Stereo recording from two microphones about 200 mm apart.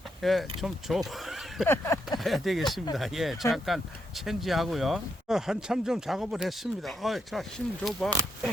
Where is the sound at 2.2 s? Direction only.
Centre (ahead or behind).